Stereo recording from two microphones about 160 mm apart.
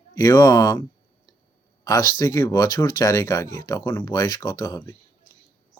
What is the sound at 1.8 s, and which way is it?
Speech, 25° left (ahead or behind).